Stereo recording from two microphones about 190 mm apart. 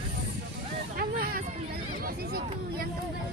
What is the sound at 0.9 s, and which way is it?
Hubbub, 50° right (ahead or behind).